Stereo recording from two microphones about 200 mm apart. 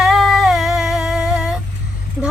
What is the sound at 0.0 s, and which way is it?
Humming, centre (ahead or behind).